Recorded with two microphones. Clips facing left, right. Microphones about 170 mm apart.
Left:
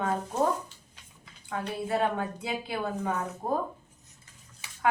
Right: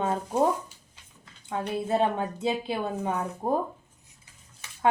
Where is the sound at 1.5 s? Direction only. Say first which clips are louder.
Right 3 dB; 25° right (ahead or behind).